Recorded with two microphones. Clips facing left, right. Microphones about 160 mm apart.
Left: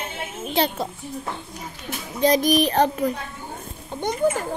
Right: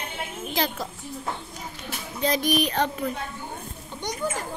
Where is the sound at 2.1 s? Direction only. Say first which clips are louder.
Left 6 dB; 40° left (ahead or behind).